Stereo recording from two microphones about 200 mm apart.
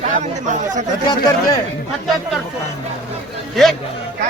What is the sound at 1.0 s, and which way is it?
Speech, 20° left (ahead or behind).